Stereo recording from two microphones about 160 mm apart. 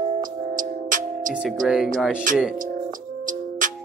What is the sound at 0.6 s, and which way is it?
Music, 55° right (ahead or behind).